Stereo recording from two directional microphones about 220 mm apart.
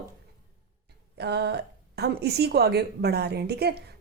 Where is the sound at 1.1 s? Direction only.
50° right (ahead or behind).